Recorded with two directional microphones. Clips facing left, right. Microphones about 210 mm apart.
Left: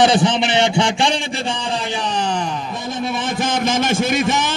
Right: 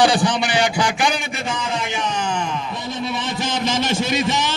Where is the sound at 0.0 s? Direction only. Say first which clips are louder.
Left 2 dB; 20° left (ahead or behind).